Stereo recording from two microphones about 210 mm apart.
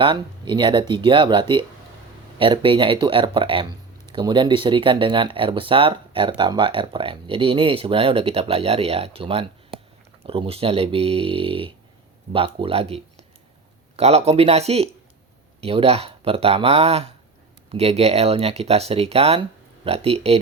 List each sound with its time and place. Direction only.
0.0 s speech: 20° right (ahead or behind)